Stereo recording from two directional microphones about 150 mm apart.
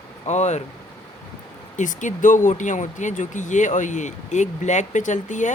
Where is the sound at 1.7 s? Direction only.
55° left (ahead or behind).